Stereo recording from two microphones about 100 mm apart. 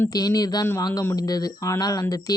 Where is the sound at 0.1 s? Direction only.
40° left (ahead or behind).